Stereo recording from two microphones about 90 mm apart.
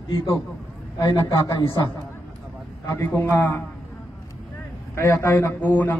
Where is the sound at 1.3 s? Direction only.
40° left (ahead or behind).